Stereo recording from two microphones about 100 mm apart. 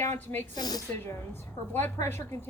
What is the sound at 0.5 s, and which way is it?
Speech, 40° left (ahead or behind).